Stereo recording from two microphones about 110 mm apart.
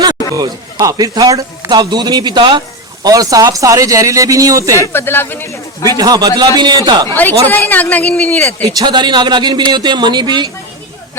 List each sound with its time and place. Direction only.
0.3 s a man's voice: 35° right (ahead or behind)
4.8 s speech: 20° left (ahead or behind)
6.0 s a man's voice: 35° right (ahead or behind)
7.1 s speech: 15° left (ahead or behind)
8.6 s a man's voice: 45° right (ahead or behind)